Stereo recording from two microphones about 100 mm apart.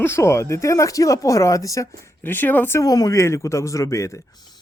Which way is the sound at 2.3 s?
20° left (ahead or behind).